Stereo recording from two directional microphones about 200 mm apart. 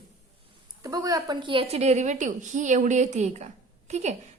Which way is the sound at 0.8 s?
20° right (ahead or behind).